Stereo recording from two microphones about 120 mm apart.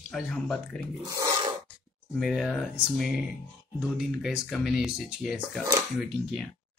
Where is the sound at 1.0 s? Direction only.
30° right (ahead or behind).